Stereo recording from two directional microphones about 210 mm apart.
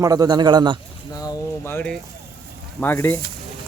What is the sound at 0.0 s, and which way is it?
Speech, 15° right (ahead or behind).